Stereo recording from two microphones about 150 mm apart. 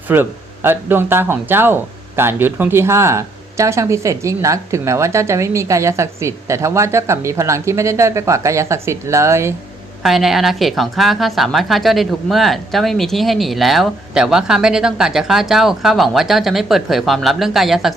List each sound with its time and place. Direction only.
0.1 s speech: 15° right (ahead or behind)
10.0 s speech: centre (ahead or behind)